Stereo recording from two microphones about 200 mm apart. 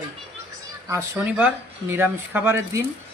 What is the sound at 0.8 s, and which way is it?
Speech, 15° right (ahead or behind).